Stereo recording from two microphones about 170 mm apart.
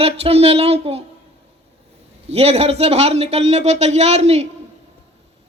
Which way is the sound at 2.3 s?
35° right (ahead or behind).